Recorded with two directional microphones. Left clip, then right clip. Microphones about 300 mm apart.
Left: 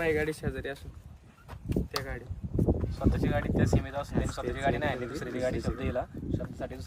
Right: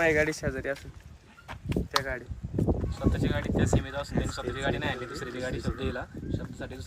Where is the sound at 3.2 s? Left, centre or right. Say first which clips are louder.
Left 1 dB; left.